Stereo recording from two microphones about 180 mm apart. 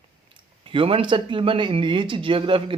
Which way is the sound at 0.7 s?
30° right (ahead or behind).